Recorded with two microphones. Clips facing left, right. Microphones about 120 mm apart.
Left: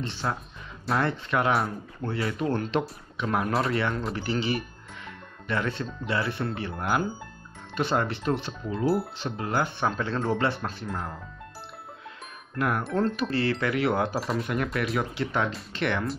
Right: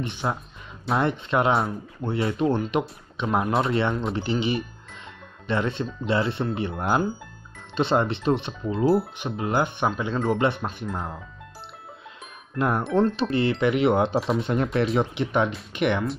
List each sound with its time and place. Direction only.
0.0 s speech: 20° right (ahead or behind)
4.1 s music: 20° right (ahead or behind)
6.0 s speech: 25° right (ahead or behind)
12.5 s speech: 25° right (ahead or behind)